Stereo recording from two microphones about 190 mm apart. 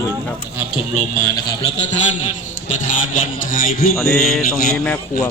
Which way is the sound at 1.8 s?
35° left (ahead or behind).